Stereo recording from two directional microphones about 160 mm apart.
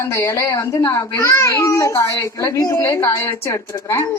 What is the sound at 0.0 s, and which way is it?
A child's voice, 15° left (ahead or behind).